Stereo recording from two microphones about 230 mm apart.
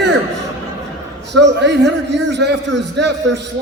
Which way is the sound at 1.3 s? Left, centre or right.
Right.